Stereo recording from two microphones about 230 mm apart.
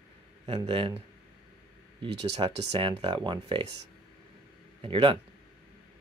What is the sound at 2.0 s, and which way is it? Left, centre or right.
Speech, right.